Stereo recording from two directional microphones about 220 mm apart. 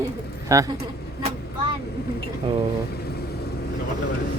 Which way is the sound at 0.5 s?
15° right (ahead or behind).